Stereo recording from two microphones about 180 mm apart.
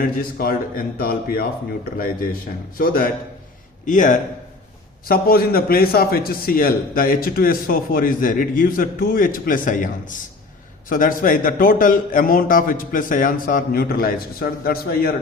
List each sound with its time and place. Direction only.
0.0 s a man's voice: 55° left (ahead or behind)
2.7 s a man's voice: 55° left (ahead or behind)
5.0 s a man's voice: 55° left (ahead or behind)